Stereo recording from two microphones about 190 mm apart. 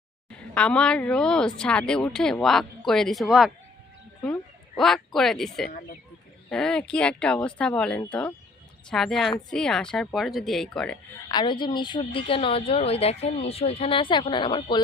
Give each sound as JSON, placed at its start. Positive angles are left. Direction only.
{"t": 0.3, "sound": "speech", "side_deg": 5}
{"t": 4.8, "sound": "speech", "side_deg": 0}
{"t": 11.3, "sound": "a woman's voice", "side_deg": 25}